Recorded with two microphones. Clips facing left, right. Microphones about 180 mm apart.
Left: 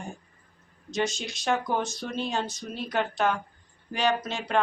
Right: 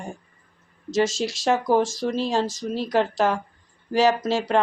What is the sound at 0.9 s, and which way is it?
Speech, 90° right.